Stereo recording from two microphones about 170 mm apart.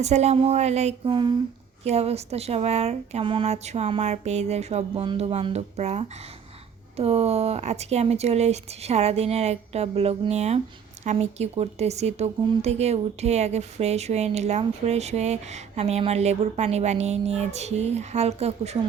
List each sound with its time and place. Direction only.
0.0 s a woman's voice: 40° right (ahead or behind)